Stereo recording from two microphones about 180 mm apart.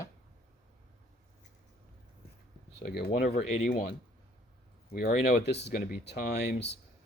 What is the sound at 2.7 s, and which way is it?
Speech, 65° left (ahead or behind).